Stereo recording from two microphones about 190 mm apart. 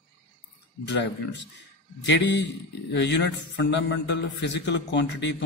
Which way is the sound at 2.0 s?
65° left (ahead or behind).